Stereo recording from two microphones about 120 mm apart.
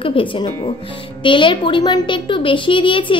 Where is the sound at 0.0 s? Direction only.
45° left (ahead or behind).